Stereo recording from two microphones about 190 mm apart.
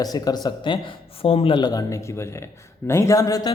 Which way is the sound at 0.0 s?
20° left (ahead or behind).